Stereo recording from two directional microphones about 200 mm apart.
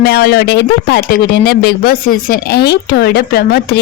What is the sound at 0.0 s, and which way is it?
A woman's voice, 50° left (ahead or behind).